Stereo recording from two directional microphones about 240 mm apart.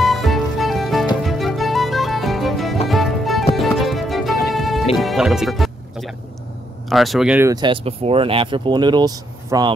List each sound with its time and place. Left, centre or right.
0.0 s music: centre
6.9 s speech: centre